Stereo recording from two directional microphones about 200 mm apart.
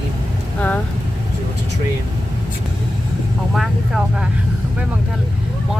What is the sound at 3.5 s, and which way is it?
Vehicle, centre (ahead or behind).